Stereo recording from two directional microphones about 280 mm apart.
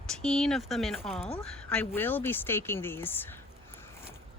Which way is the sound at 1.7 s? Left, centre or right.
Centre.